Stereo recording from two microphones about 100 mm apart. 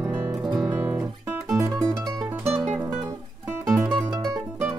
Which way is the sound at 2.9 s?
35° right (ahead or behind).